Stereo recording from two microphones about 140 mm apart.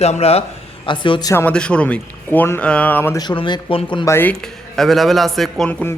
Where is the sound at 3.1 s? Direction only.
35° left (ahead or behind).